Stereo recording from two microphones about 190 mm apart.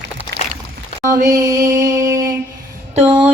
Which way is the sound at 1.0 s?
15° right (ahead or behind).